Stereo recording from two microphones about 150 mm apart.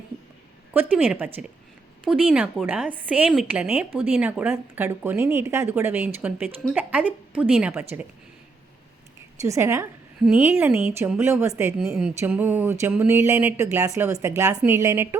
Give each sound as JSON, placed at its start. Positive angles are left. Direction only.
{"t": 0.7, "sound": "speech", "side_deg": -10}
{"t": 9.4, "sound": "a woman's voice", "side_deg": -20}
{"t": 10.2, "sound": "a woman's voice", "side_deg": -5}
{"t": 11.8, "sound": "a woman's voice", "side_deg": -5}